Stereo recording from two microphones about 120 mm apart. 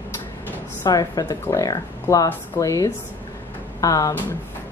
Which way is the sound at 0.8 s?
30° left (ahead or behind).